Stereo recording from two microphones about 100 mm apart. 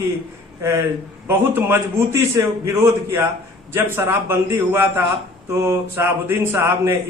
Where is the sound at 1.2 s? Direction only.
20° right (ahead or behind).